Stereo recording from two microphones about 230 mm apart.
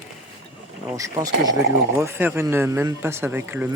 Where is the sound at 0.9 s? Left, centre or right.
Centre.